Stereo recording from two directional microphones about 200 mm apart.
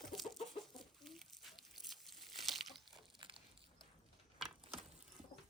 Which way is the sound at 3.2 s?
25° right (ahead or behind).